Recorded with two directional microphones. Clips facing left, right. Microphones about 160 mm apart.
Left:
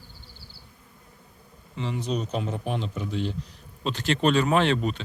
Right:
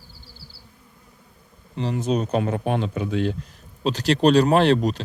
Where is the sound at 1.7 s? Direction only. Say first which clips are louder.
Right 6 dB; 40° right (ahead or behind); by 3.3 s 60° right (ahead or behind).